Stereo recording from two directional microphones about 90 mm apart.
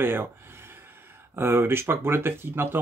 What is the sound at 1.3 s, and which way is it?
Speech, 25° right (ahead or behind).